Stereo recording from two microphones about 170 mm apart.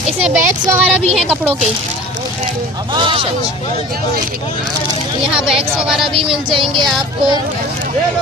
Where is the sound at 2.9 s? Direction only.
30° right (ahead or behind).